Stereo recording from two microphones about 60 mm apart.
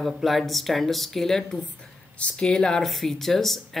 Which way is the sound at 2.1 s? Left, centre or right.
Left.